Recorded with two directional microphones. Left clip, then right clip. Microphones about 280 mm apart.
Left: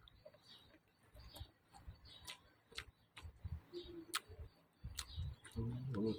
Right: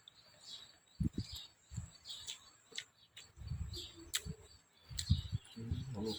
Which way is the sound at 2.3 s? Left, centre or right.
Centre.